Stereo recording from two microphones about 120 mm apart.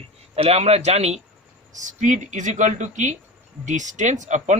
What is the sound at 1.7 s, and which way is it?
Speech, 90° right.